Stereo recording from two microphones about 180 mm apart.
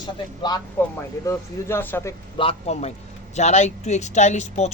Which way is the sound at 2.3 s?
35° left (ahead or behind).